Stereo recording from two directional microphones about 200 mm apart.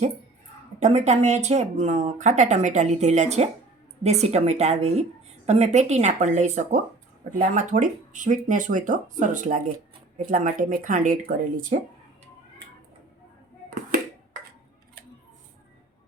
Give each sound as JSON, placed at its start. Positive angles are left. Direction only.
{"t": 0.8, "sound": "speech", "side_deg": -35}